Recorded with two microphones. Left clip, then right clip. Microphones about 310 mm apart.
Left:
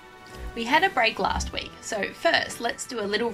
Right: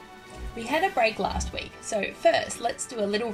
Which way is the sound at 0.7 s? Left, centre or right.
Left.